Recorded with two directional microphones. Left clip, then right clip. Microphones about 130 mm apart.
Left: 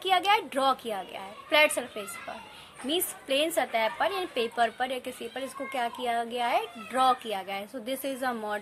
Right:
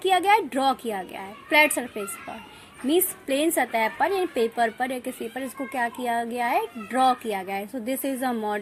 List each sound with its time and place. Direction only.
0.0 s speech: 35° right (ahead or behind)